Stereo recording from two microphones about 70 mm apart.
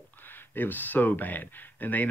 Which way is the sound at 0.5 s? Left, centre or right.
Left.